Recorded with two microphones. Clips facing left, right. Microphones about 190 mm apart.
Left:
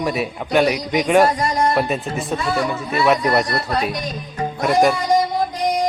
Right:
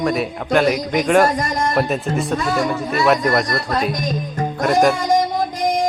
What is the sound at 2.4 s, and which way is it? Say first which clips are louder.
Speech: right 2 dB; 45° right (ahead or behind).